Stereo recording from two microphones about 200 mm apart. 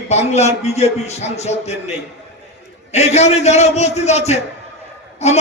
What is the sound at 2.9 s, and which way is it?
A man's voice, 35° left (ahead or behind).